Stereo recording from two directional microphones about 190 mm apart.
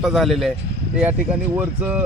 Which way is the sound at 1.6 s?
10° right (ahead or behind).